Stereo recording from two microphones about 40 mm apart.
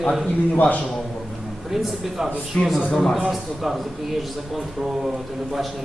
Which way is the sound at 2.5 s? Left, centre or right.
Left.